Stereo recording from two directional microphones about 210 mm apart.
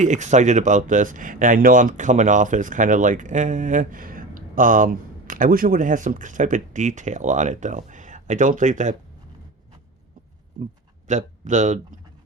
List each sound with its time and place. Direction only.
0.0 s speech: 35° right (ahead or behind)
11.1 s a man's voice: 35° right (ahead or behind)